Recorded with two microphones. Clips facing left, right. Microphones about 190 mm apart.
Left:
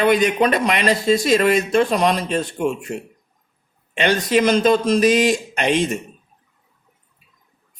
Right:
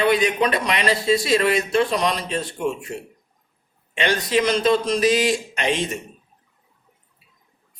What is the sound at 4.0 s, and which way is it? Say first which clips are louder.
Speech: left 3 dB; 45° left (ahead or behind).